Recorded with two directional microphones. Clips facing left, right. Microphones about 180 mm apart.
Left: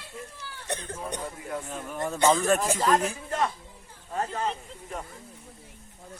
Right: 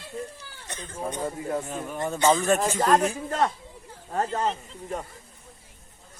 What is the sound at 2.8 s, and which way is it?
Speech, 50° right (ahead or behind).